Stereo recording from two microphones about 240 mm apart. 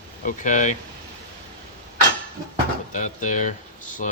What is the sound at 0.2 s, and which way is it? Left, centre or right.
Speech, left.